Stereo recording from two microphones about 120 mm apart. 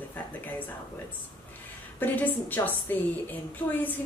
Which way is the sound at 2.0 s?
15° left (ahead or behind).